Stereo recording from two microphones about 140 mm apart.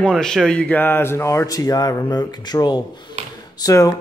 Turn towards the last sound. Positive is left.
turn(degrees=20)  # may be behind; listen again after turning